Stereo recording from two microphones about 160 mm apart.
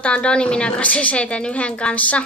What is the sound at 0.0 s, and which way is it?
A woman's voice, 5° left (ahead or behind).